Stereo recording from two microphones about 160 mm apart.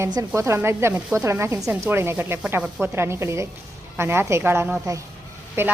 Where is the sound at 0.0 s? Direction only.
20° right (ahead or behind).